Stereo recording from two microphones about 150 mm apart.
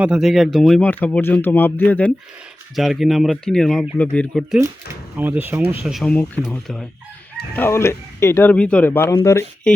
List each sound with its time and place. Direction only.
0.0 s speech: 5° right (ahead or behind)
2.7 s speech: centre (ahead or behind)
5.1 s speech: 10° right (ahead or behind)
5.8 s speech: centre (ahead or behind)
6.1 s speech: 10° left (ahead or behind)
7.5 s speech: 15° left (ahead or behind)